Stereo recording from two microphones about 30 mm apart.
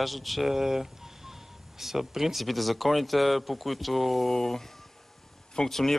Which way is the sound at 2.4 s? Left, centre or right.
Centre.